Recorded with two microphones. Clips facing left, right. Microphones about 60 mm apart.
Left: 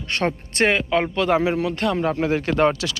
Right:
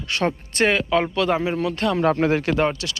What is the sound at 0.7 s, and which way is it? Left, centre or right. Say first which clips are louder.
Speech: even; left.